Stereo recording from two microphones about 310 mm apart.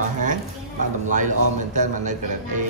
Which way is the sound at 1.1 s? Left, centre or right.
Right.